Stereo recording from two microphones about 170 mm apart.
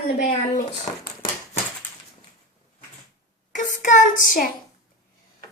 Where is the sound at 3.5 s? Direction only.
45° left (ahead or behind).